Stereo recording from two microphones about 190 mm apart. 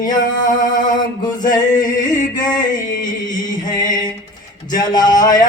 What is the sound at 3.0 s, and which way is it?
Chant, 20° left (ahead or behind).